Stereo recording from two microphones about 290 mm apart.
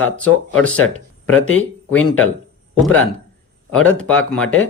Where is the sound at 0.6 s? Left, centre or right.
Left.